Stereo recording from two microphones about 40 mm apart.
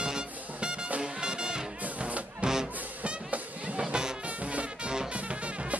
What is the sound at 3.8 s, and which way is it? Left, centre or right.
Music, centre.